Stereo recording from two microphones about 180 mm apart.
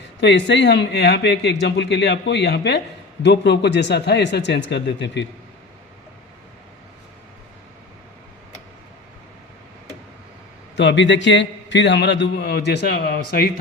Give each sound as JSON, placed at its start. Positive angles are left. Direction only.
{"t": 0.2, "sound": "a man's voice", "side_deg": 75}
{"t": 10.8, "sound": "a man's voice", "side_deg": 85}